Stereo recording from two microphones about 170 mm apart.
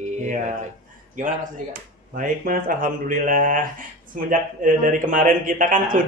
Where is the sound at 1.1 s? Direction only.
50° right (ahead or behind).